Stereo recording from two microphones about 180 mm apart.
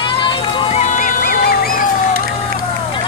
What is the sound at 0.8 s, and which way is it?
Music, 45° left (ahead or behind).